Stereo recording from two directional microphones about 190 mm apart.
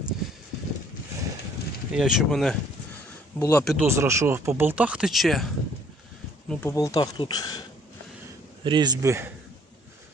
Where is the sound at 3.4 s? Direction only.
15° left (ahead or behind).